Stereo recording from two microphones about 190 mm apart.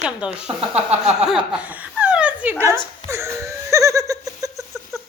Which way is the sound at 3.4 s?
15° right (ahead or behind).